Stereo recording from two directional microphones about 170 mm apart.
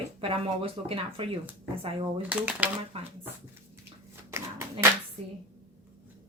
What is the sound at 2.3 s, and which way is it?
Speech, 10° right (ahead or behind).